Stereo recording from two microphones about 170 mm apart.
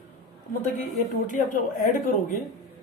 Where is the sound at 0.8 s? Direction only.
45° left (ahead or behind).